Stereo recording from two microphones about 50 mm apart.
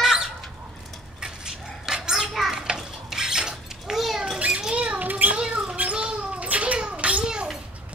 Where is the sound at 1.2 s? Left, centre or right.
Centre.